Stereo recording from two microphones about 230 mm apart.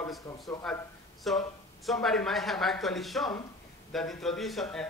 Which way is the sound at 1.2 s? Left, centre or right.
Centre.